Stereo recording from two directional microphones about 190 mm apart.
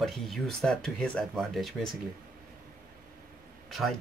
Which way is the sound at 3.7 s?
Centre (ahead or behind).